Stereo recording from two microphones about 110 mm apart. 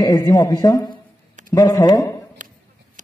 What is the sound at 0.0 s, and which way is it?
A man's voice, 35° left (ahead or behind).